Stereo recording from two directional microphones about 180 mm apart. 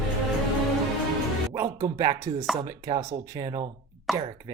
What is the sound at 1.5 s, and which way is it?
Speech, 20° right (ahead or behind).